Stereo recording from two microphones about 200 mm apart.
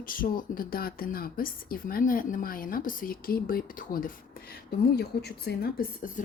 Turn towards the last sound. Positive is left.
turn(degrees=45)  # may be behind; listen again after turning